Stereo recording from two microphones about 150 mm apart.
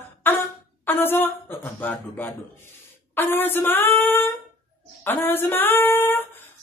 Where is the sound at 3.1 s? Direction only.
15° left (ahead or behind).